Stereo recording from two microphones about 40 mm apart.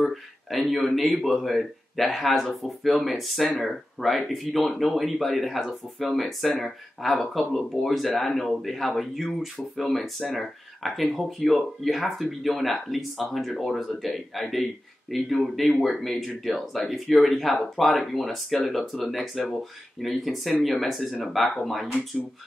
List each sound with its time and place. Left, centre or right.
0.0 s speech: centre